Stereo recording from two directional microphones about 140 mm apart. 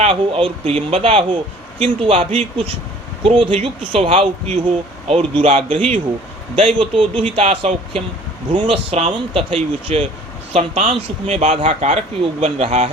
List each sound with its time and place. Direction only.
0.0 s speech: 40° right (ahead or behind)